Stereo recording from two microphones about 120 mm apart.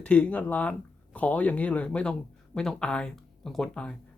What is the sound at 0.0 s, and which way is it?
Speech, 10° left (ahead or behind).